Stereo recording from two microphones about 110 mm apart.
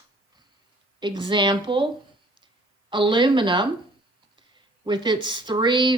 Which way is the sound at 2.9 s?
45° right (ahead or behind).